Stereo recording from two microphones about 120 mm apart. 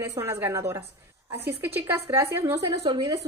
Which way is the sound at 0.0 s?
20° right (ahead or behind).